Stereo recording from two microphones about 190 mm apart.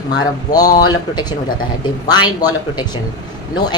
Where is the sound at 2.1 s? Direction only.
20° left (ahead or behind).